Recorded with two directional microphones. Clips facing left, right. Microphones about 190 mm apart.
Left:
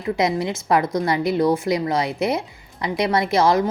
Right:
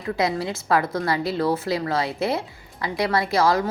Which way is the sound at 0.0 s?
20° left (ahead or behind).